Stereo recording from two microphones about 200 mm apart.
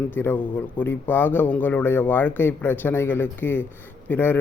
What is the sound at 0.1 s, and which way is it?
Speech, 10° left (ahead or behind).